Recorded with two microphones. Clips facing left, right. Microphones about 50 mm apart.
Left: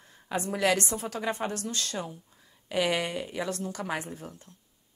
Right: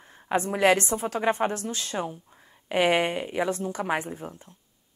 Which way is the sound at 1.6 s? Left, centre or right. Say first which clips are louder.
Right 3 dB; centre.